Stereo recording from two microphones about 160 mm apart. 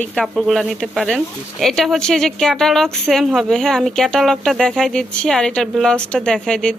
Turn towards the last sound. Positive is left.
turn(degrees=5)  # may be behind; listen again after turning